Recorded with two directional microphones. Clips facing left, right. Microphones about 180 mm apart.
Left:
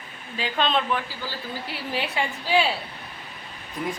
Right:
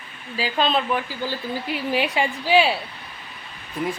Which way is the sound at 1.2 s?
15° right (ahead or behind).